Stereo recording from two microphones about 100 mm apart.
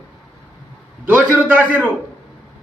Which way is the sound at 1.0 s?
15° right (ahead or behind).